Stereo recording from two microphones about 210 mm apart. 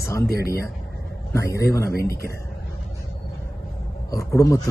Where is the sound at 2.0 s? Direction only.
45° left (ahead or behind).